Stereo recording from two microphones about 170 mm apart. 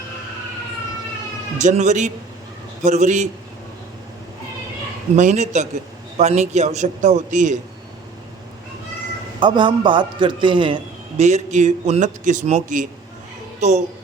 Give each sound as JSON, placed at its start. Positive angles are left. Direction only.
{"t": 1.5, "sound": "a man's voice", "side_deg": -45}
{"t": 5.1, "sound": "a man's voice", "side_deg": -45}
{"t": 9.4, "sound": "a man's voice", "side_deg": -25}
{"t": 11.2, "sound": "a man's voice", "side_deg": -40}